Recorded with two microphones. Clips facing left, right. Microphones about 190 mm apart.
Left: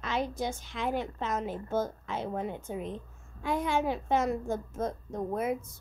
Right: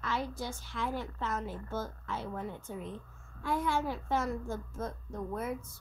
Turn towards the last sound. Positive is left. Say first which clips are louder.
# left 5 dB
turn(degrees=20)  # may be behind; listen again after turning